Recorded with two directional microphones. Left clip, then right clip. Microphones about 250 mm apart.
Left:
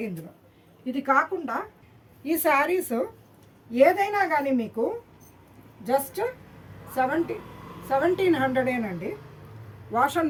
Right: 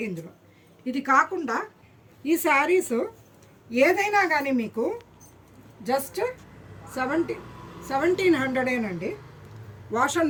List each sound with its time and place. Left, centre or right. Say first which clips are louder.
0.9 s a woman's voice: right 2 dB; centre
2.2 s a woman's voice: right 1 dB; left
3.7 s a woman's voice: left 1 dB; centre